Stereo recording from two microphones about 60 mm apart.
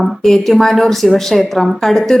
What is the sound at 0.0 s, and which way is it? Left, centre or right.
A woman's voice, centre.